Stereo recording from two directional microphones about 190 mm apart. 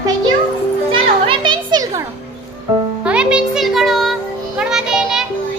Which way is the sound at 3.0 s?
5° right (ahead or behind).